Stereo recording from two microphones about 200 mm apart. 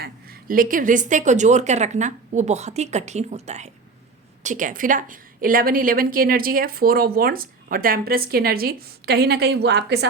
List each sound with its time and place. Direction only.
0.0 s a woman's voice: 45° right (ahead or behind)